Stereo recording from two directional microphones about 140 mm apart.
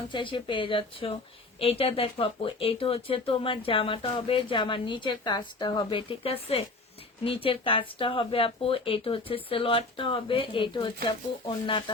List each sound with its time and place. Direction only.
0.1 s a woman's voice: 35° left (ahead or behind)